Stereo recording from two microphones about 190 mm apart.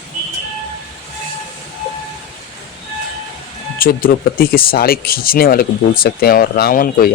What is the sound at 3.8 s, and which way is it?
Speech, 50° left (ahead or behind).